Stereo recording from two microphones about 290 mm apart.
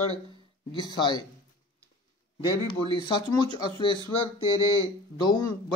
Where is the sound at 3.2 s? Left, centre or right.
Centre.